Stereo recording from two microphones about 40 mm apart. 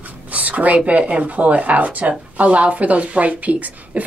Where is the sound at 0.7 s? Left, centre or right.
Right.